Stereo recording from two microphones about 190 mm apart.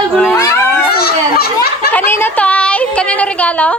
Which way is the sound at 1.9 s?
10° left (ahead or behind).